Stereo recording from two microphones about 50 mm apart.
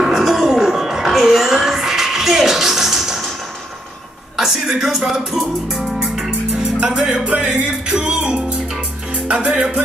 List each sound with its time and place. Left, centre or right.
0.0 s music: centre
4.4 s music: centre